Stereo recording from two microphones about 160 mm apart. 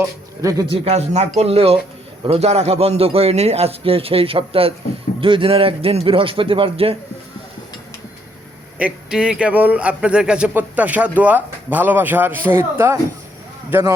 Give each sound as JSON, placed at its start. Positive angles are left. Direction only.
{"t": 0.0, "sound": "a man's voice", "side_deg": -20}
{"t": 0.7, "sound": "a man's voice", "side_deg": -40}
{"t": 8.8, "sound": "speech", "side_deg": -5}